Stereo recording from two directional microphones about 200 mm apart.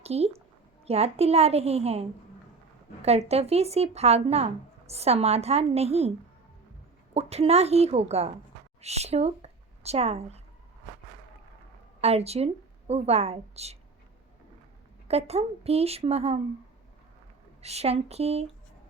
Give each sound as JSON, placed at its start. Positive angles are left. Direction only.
{"t": 0.0, "sound": "a woman's voice", "side_deg": -30}
{"t": 11.9, "sound": "speech", "side_deg": -30}
{"t": 15.0, "sound": "speech", "side_deg": -30}
{"t": 17.6, "sound": "speech", "side_deg": -30}